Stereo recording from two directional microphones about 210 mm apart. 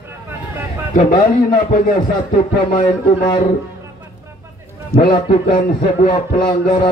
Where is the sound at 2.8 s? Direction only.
20° left (ahead or behind).